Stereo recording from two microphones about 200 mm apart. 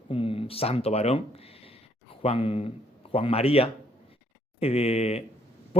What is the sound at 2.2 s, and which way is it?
Speech, 30° left (ahead or behind).